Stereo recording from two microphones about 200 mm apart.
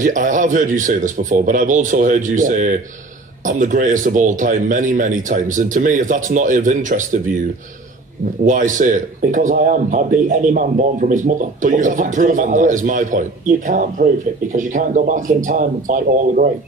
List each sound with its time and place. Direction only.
0.0 s a man's voice: 40° right (ahead or behind)
8.5 s a man's voice: 40° right (ahead or behind)